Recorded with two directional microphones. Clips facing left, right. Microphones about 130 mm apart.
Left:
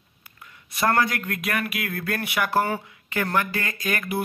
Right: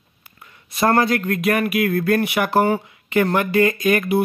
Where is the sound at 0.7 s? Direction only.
30° right (ahead or behind).